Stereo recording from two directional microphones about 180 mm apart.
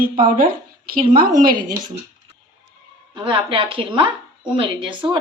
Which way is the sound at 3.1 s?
25° right (ahead or behind).